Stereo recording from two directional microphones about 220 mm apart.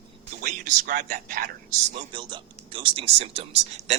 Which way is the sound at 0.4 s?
35° right (ahead or behind).